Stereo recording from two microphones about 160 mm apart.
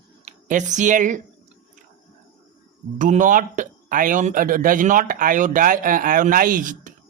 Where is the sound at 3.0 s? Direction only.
55° right (ahead or behind).